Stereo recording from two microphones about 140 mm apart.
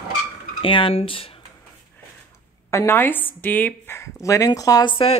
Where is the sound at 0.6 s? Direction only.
35° left (ahead or behind).